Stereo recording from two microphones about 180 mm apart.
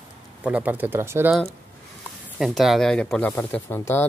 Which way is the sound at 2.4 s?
Centre (ahead or behind).